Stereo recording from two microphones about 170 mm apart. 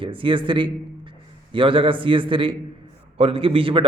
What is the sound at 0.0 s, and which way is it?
A man's voice, 30° right (ahead or behind).